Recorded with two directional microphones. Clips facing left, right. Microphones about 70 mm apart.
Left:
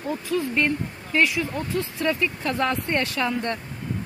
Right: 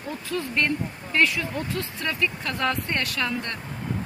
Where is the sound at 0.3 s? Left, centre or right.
Centre.